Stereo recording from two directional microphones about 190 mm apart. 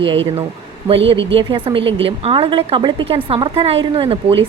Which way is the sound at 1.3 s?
25° right (ahead or behind).